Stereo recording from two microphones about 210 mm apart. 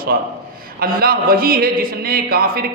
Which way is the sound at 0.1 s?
45° right (ahead or behind).